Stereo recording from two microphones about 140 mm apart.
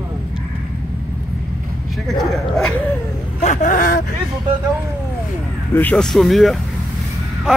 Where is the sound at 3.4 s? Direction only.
65° left (ahead or behind).